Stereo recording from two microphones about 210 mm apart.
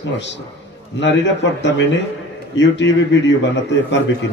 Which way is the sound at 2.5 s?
60° left (ahead or behind).